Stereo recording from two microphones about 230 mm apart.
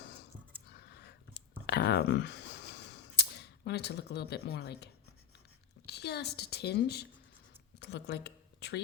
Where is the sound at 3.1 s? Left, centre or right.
Left.